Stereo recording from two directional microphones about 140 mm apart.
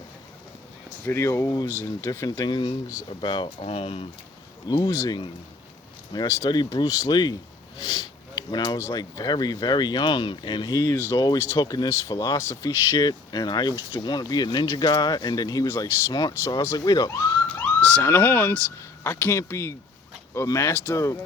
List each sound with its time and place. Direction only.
1.0 s speech: 20° left (ahead or behind); by 4.0 s 45° left (ahead or behind)
4.7 s speech: 25° left (ahead or behind)
17.7 s speech: 10° left (ahead or behind)